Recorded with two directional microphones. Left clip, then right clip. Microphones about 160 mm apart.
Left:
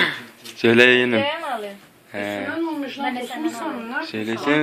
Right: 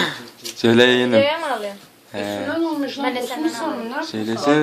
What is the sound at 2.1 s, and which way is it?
Speech, 5° right (ahead or behind).